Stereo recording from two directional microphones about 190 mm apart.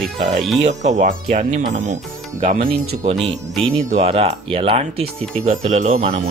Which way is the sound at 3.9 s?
35° right (ahead or behind).